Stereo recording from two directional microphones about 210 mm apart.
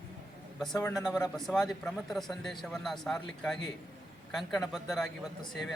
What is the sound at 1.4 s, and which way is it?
Speech, centre (ahead or behind).